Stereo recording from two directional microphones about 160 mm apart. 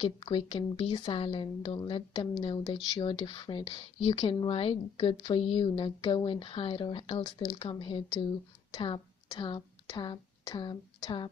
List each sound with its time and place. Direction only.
0.0 s a woman's voice: 35° left (ahead or behind)